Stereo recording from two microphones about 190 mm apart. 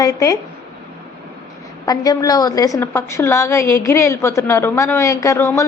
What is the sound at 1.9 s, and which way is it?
A woman's voice, 20° left (ahead or behind).